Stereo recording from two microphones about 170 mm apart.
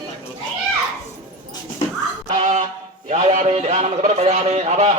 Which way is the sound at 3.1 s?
45° right (ahead or behind).